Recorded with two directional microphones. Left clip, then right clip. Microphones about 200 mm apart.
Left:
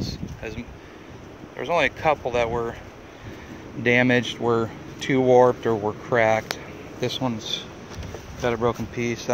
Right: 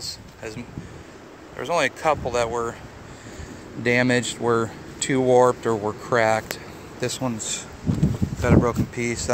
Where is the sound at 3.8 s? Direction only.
5° left (ahead or behind).